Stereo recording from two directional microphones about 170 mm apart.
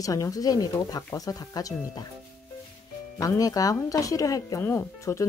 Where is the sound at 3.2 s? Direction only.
20° left (ahead or behind).